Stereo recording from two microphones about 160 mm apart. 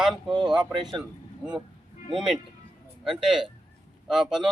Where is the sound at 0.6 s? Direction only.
30° right (ahead or behind).